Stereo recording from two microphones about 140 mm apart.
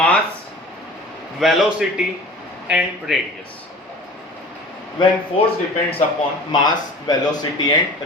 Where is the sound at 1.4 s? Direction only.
Centre (ahead or behind).